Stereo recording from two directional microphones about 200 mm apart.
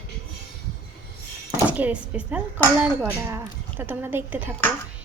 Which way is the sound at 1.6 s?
5° right (ahead or behind).